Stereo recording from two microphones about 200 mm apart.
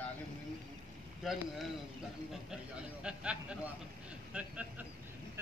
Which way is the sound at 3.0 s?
5° right (ahead or behind).